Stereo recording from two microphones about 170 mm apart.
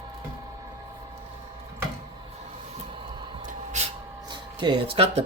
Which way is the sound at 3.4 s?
45° right (ahead or behind).